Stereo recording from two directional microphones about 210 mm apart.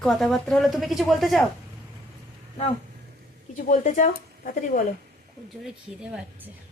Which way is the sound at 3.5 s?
35° left (ahead or behind).